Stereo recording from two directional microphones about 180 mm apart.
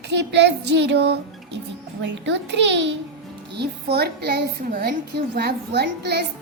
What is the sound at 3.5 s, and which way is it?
A woman's voice, 65° right (ahead or behind).